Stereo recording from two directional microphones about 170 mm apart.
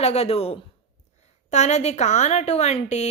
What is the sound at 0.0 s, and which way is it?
A woman's voice, 40° left (ahead or behind).